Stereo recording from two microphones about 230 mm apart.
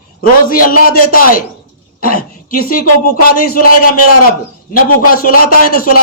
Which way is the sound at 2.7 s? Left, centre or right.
Left.